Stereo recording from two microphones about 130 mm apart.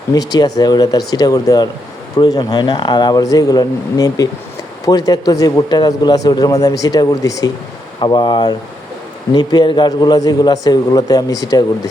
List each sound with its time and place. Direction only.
0.1 s a man's voice: 30° left (ahead or behind)